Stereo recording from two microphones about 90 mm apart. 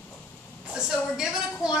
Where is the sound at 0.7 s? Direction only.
5° right (ahead or behind).